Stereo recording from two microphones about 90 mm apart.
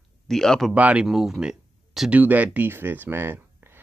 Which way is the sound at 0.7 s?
15° right (ahead or behind).